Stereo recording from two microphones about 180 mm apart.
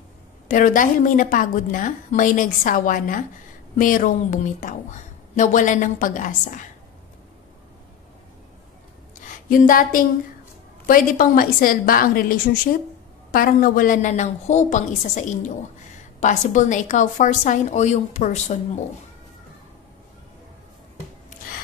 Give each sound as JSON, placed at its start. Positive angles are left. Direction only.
{"t": 0.5, "sound": "a woman's voice", "side_deg": 45}
{"t": 9.5, "sound": "a woman's voice", "side_deg": 50}